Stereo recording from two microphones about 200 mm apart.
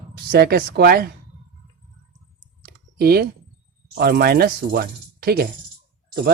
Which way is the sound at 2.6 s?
50° right (ahead or behind).